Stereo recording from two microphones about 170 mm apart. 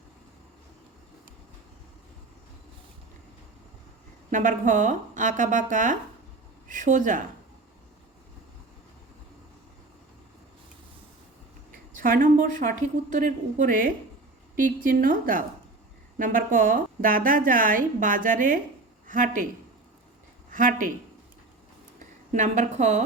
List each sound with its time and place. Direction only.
4.3 s a woman's voice: 50° right (ahead or behind)
11.7 s a woman's voice: 55° right (ahead or behind)
20.5 s speech: 50° right (ahead or behind)
21.9 s a woman's voice: 45° right (ahead or behind)